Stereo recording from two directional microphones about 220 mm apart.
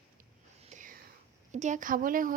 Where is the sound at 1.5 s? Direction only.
35° right (ahead or behind).